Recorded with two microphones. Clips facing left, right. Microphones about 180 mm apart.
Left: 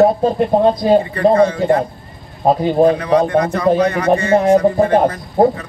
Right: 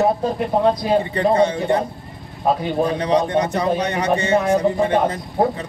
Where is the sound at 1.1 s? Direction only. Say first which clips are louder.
Left 4 dB; 25° right (ahead or behind).